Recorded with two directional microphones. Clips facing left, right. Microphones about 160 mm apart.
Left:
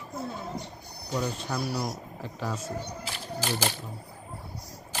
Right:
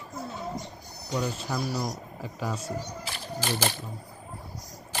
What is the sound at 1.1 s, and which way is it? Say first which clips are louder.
Speech: right 1 dB; centre (ahead or behind).